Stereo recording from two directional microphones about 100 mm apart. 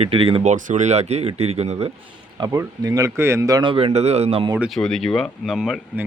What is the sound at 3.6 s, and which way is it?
Speech, 75° right (ahead or behind).